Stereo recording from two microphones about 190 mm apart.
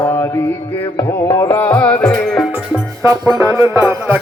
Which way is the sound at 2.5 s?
15° right (ahead or behind).